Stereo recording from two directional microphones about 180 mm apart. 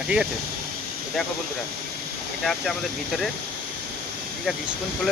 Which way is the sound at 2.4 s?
Centre (ahead or behind).